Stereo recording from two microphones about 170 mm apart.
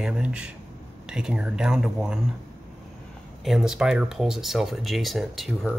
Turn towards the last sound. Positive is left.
turn(degrees=0)  # may be behind; listen again after turning